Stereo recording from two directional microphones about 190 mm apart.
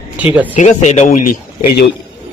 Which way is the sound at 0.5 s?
35° left (ahead or behind).